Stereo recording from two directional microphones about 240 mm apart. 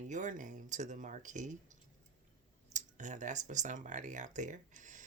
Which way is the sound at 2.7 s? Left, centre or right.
Right.